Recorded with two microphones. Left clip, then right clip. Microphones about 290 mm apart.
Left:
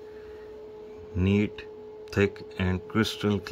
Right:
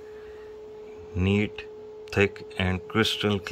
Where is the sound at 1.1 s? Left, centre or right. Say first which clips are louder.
Right 1 dB; centre.